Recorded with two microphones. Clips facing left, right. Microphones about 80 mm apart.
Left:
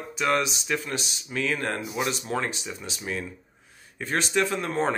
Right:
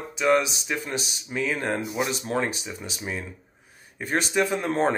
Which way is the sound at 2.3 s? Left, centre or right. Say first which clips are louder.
Right 4 dB; right.